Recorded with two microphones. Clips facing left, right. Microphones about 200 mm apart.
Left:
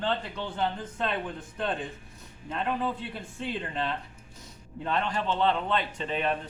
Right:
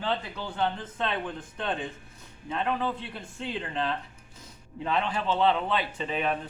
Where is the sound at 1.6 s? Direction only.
Centre (ahead or behind).